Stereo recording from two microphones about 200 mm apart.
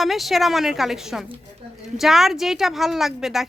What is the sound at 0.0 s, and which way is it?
A woman's voice, centre (ahead or behind).